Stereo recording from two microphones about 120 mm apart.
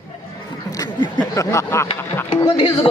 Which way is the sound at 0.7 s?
30° left (ahead or behind).